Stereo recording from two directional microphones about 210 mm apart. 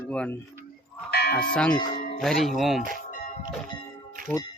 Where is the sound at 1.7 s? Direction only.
20° left (ahead or behind).